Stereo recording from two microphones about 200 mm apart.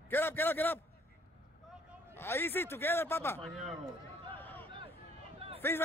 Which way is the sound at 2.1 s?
10° left (ahead or behind).